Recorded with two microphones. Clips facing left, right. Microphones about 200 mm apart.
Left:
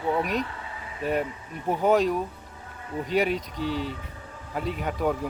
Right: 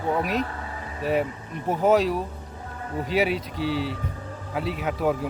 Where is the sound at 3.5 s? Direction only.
45° left (ahead or behind).